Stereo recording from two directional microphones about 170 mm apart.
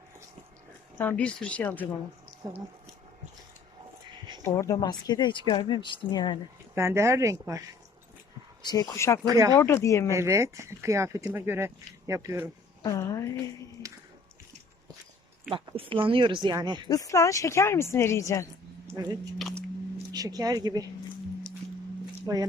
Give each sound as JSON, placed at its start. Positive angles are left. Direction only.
{"t": 0.9, "sound": "a woman's voice", "side_deg": 10}
{"t": 4.4, "sound": "speech", "side_deg": 15}
{"t": 6.7, "sound": "speech", "side_deg": -15}
{"t": 8.6, "sound": "speech", "side_deg": 20}
{"t": 9.2, "sound": "speech", "side_deg": -20}
{"t": 9.6, "sound": "a woman's voice", "side_deg": 15}
{"t": 10.1, "sound": "speech", "side_deg": -15}
{"t": 12.8, "sound": "speech", "side_deg": 20}
{"t": 15.5, "sound": "speech", "side_deg": -30}
{"t": 16.9, "sound": "a woman's voice", "side_deg": 20}
{"t": 18.9, "sound": "speech", "side_deg": -25}
{"t": 19.4, "sound": "biting", "side_deg": 0}
{"t": 20.1, "sound": "speech", "side_deg": -20}
{"t": 22.3, "sound": "speech", "side_deg": -20}